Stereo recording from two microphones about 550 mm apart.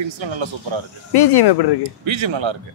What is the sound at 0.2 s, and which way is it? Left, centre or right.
Speech, right.